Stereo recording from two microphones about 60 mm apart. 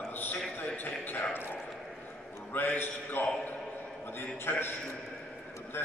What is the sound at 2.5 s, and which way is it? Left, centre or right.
A man's voice, left.